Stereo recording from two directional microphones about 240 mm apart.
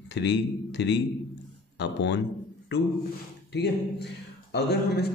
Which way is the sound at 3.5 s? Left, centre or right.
Left.